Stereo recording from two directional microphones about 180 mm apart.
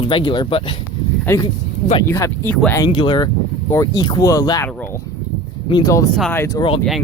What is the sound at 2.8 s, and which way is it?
Speech, 25° left (ahead or behind).